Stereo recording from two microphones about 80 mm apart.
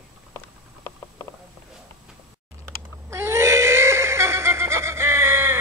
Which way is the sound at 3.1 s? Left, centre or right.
Right.